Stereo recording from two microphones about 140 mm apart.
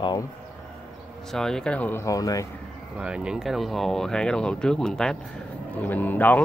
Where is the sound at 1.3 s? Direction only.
5° left (ahead or behind); by 2.4 s 25° left (ahead or behind).